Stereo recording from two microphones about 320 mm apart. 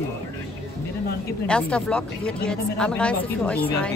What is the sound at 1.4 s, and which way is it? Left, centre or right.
Speech, centre.